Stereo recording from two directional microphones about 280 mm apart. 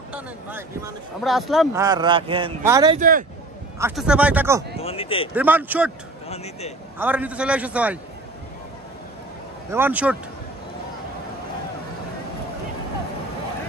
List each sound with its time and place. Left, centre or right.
0.1 s a man's voice: centre
1.7 s speech: centre
3.0 s speech: right
3.8 s a man's voice: centre
4.7 s speech: left
5.3 s a man's voice: centre
6.2 s speech: left
7.0 s a man's voice: centre
9.7 s speech: centre